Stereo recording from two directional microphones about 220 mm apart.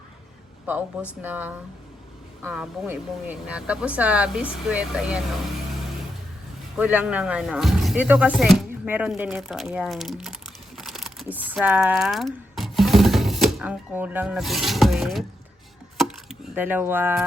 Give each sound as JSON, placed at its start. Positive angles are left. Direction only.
{"t": 0.7, "sound": "speech", "side_deg": -10}
{"t": 6.7, "sound": "speech", "side_deg": -5}
{"t": 10.8, "sound": "typing", "side_deg": 0}
{"t": 16.0, "sound": "wood", "side_deg": 0}